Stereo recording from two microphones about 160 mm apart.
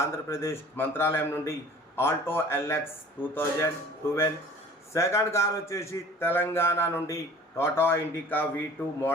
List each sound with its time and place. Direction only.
0.0 s a man's voice: 15° left (ahead or behind)